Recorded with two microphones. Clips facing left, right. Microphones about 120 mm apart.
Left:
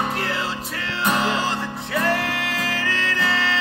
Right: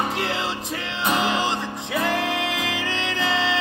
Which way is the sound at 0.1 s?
20° right (ahead or behind).